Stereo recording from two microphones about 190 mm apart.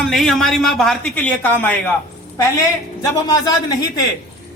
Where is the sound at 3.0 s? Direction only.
20° left (ahead or behind).